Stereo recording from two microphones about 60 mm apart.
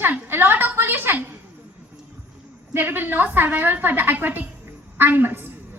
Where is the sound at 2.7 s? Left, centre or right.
Right.